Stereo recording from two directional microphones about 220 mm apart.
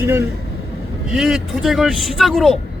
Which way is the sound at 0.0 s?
10° right (ahead or behind).